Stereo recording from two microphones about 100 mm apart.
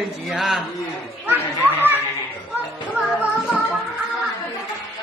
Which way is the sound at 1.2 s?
20° right (ahead or behind).